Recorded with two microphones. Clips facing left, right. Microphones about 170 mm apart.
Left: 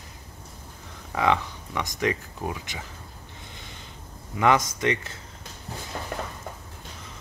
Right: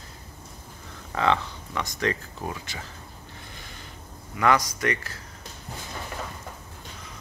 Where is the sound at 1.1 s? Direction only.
15° left (ahead or behind).